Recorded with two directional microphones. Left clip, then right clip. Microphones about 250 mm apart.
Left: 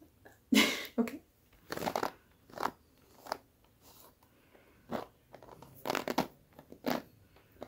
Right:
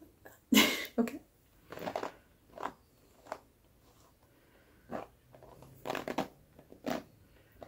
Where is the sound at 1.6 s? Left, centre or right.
Left.